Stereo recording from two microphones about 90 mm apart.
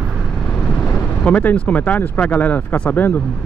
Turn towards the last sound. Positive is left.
turn(degrees=20)  # may be behind; listen again after turning